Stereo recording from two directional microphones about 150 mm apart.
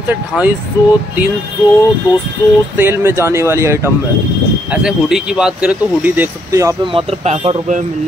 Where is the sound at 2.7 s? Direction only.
15° right (ahead or behind).